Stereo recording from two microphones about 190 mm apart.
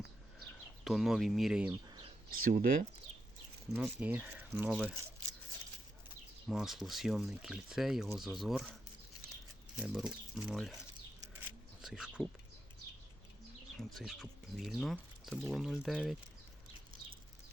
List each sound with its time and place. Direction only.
0.9 s speech: centre (ahead or behind)
1.7 s bird: 20° right (ahead or behind)
2.3 s speech: 50° right (ahead or behind)
3.7 s speech: 5° right (ahead or behind)
6.5 s speech: centre (ahead or behind)
9.8 s speech: centre (ahead or behind)
11.8 s bird: 5° right (ahead or behind)
13.7 s speech: centre (ahead or behind)